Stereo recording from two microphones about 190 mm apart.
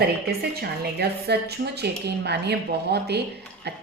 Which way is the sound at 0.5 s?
55° right (ahead or behind).